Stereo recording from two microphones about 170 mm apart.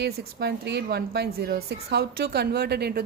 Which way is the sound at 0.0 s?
75° right (ahead or behind).